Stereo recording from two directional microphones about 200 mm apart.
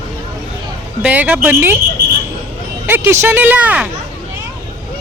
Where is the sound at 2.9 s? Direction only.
10° right (ahead or behind).